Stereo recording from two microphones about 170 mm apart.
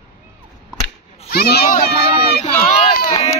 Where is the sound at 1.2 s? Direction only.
65° left (ahead or behind).